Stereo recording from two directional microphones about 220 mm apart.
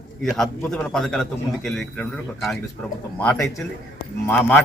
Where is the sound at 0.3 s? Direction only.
Centre (ahead or behind).